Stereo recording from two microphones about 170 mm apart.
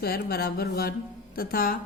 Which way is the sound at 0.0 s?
65° left (ahead or behind).